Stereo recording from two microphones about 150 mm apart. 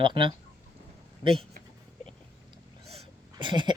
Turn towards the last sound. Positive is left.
turn(degrees=-30)  # may be behind; listen again after turning